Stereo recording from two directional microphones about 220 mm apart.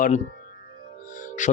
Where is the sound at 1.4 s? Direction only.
35° left (ahead or behind).